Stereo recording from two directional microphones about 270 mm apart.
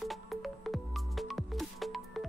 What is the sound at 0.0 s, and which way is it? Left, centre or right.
Music, centre.